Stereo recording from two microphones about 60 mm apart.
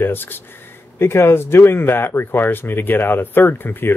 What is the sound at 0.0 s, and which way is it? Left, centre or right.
Speech, left.